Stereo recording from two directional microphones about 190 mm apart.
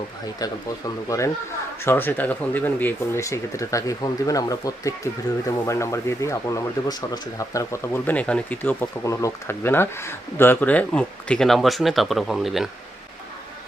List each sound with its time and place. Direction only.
1.0 s speech: 15° left (ahead or behind); by 12.6 s centre (ahead or behind)